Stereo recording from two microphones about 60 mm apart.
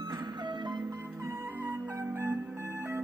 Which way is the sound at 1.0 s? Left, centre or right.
Right.